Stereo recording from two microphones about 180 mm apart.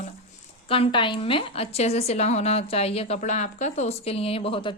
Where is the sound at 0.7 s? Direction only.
30° left (ahead or behind).